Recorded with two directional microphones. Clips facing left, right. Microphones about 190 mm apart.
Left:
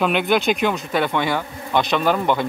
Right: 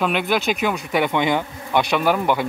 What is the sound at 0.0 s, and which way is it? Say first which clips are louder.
Speech: left 2 dB; centre (ahead or behind).